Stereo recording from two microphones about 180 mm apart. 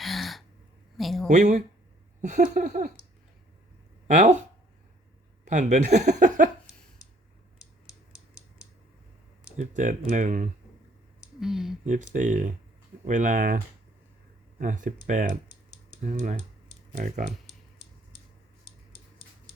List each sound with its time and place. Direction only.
0.0 s a sound: centre (ahead or behind)
1.3 s speech: 40° right (ahead or behind)
4.1 s speech: 40° right (ahead or behind)
5.5 s speech: 40° right (ahead or behind)
9.6 s speech: 45° right (ahead or behind)
11.3 s speech: centre (ahead or behind)
11.9 s speech: 45° right (ahead or behind)
14.6 s speech: 45° right (ahead or behind)